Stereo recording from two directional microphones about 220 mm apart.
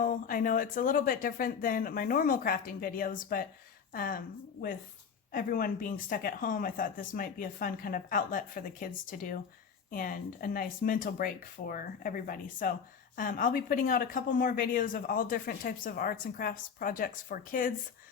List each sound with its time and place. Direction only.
0.0 s speech: 40° left (ahead or behind)
5.3 s speech: 40° left (ahead or behind)